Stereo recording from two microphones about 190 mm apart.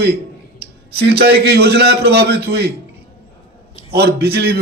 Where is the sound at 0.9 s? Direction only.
60° right (ahead or behind).